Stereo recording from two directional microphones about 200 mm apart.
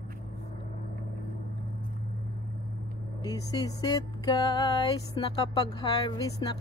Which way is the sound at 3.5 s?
20° left (ahead or behind).